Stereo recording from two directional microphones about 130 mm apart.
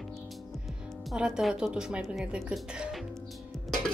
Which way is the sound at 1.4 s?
5° right (ahead or behind).